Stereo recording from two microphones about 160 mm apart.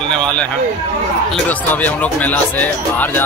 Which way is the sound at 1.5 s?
10° left (ahead or behind).